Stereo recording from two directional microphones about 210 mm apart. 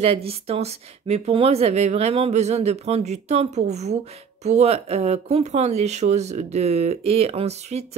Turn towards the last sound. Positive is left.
turn(degrees=-30)  # may be behind; listen again after turning